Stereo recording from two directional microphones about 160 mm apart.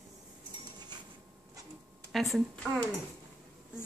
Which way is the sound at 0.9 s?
25° right (ahead or behind).